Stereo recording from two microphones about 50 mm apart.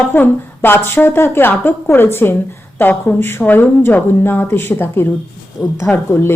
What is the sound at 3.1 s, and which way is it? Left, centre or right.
Speech, left.